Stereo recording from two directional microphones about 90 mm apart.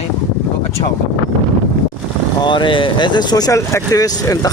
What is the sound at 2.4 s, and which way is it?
Speech, 60° left (ahead or behind).